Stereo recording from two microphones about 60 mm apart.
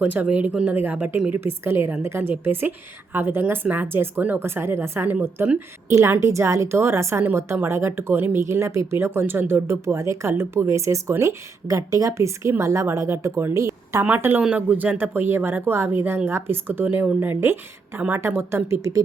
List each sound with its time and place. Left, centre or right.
0.0 s speech: right
1.3 s speech: right
4.4 s speech: right
6.1 s speech: right
8.4 s speech: right
9.8 s speech: right
11.2 s a woman's voice: right
14.2 s speech: right
14.5 s speech: right
14.9 s speech: right